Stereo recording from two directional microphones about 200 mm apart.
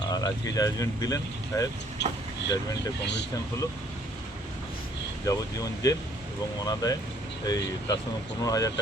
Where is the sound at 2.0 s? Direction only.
60° left (ahead or behind).